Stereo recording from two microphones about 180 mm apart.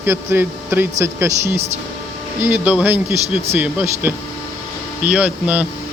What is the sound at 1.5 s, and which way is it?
Speech, 35° right (ahead or behind).